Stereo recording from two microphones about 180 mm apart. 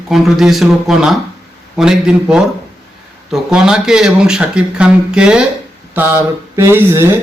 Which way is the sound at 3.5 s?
5° right (ahead or behind).